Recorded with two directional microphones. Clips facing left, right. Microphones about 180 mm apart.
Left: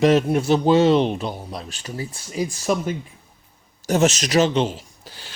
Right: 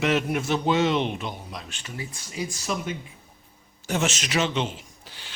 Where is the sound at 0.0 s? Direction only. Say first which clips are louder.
Left 7 dB; 35° left (ahead or behind).